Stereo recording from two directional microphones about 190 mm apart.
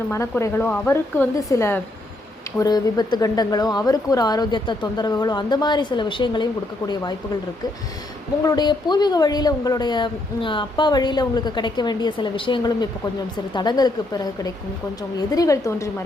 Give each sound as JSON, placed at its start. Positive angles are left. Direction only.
{"t": 0.1, "sound": "a woman's voice", "side_deg": 15}
{"t": 8.4, "sound": "a woman's voice", "side_deg": 20}